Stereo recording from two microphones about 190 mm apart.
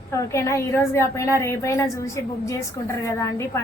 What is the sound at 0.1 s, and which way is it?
A woman's voice, 15° left (ahead or behind).